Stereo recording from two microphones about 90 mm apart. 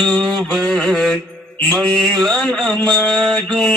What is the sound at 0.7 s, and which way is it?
Mantra, 5° left (ahead or behind).